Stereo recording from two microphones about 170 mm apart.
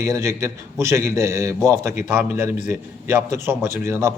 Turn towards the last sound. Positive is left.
turn(degrees=-15)  # may be behind; listen again after turning